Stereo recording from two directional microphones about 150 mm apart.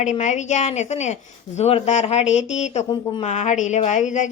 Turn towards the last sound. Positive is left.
turn(degrees=55)  # may be behind; listen again after turning